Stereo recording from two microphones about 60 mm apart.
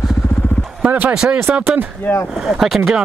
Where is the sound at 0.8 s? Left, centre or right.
Right.